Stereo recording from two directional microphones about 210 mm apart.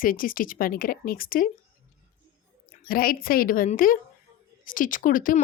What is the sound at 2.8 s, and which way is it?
Speech, 45° left (ahead or behind).